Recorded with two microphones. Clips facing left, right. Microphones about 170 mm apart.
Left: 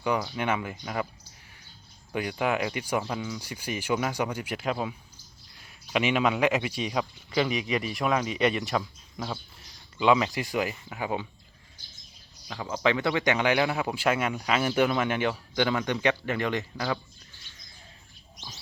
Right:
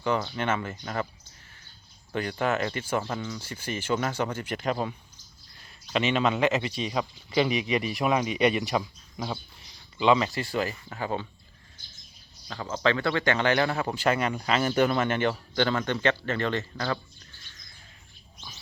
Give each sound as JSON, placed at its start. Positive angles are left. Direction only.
{"t": 0.0, "sound": "speech", "side_deg": 5}
{"t": 2.1, "sound": "speech", "side_deg": 10}
{"t": 7.0, "sound": "speech", "side_deg": -5}
{"t": 10.0, "sound": "speech", "side_deg": 5}
{"t": 12.5, "sound": "speech", "side_deg": 10}